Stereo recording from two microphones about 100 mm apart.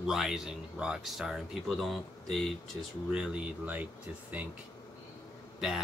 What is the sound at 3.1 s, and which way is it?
Speech, 10° right (ahead or behind).